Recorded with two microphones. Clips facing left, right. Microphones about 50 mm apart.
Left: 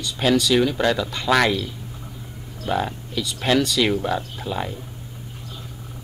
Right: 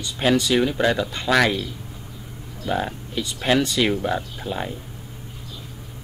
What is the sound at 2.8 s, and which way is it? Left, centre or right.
Speech, centre.